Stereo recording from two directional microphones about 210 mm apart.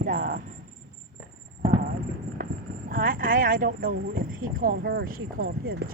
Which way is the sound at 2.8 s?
40° right (ahead or behind).